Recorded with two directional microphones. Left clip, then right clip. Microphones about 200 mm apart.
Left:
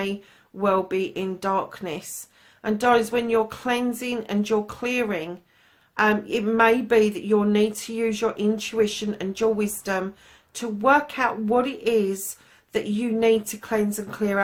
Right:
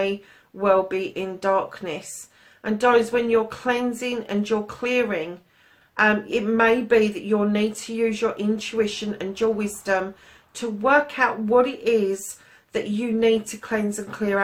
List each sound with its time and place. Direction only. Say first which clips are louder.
0.6 s a woman's voice: right 2 dB; 45° left (ahead or behind)